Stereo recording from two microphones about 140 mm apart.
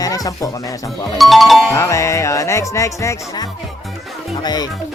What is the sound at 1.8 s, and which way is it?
Speech, 20° left (ahead or behind).